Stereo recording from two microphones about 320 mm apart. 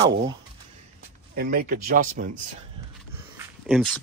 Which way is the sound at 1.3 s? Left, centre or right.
Right.